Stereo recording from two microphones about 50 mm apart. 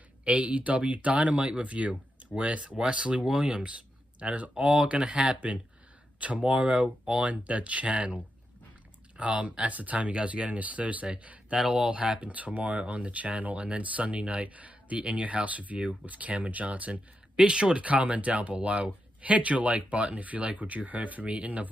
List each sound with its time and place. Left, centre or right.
0.2 s speech: right
11.5 s speech: centre
17.4 s speech: centre